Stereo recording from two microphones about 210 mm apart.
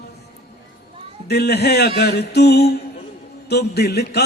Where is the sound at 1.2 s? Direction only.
50° left (ahead or behind).